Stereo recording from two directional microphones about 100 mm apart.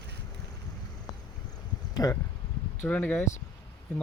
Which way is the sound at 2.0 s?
35° left (ahead or behind).